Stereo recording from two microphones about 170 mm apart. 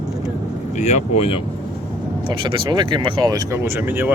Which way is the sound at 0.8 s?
40° left (ahead or behind).